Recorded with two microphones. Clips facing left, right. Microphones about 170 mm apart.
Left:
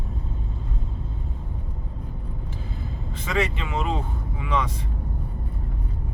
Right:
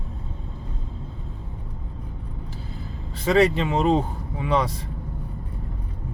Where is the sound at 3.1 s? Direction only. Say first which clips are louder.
Right 8 dB; 35° right (ahead or behind).